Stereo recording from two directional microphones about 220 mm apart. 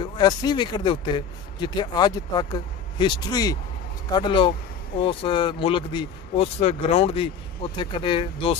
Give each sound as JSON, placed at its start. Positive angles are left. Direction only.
{"t": 0.0, "sound": "speech", "side_deg": 20}